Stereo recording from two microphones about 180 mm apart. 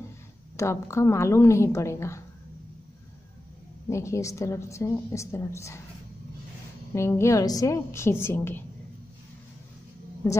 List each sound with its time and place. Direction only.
0.6 s a woman's voice: 15° left (ahead or behind)
3.9 s a woman's voice: 15° left (ahead or behind)
6.9 s a woman's voice: 15° left (ahead or behind)
10.2 s a woman's voice: 20° left (ahead or behind)